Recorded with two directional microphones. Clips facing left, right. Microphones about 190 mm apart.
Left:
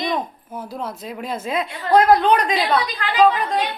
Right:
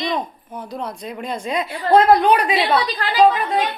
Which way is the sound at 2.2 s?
10° right (ahead or behind).